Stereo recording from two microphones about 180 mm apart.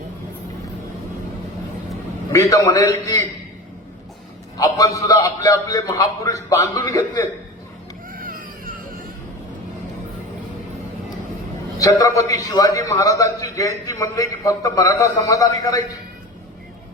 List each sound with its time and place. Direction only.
2.3 s a man's voice: 15° left (ahead or behind)
4.5 s a man's voice: 20° left (ahead or behind)
8.2 s baby cry: 50° right (ahead or behind)
11.8 s a man's voice: 20° left (ahead or behind)